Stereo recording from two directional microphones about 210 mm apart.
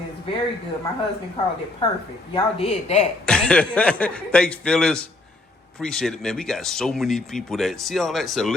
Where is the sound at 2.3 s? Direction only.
30° left (ahead or behind).